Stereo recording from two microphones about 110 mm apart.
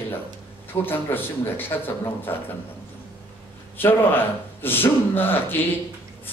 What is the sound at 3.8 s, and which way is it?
A man's voice, 20° left (ahead or behind).